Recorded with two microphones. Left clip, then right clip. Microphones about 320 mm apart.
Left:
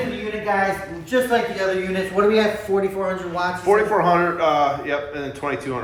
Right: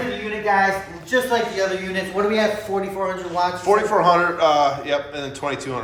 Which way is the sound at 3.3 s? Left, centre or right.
Centre.